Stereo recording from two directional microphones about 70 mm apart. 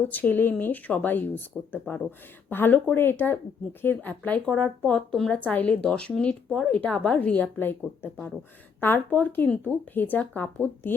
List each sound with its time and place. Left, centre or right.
0.1 s speech: left; by 5.3 s centre
5.3 s speech: left